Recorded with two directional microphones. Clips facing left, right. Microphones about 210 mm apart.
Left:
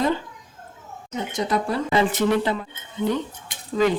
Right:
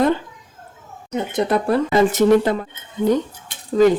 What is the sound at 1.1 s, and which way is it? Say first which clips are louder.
Speech: right 5 dB; 60° right (ahead or behind).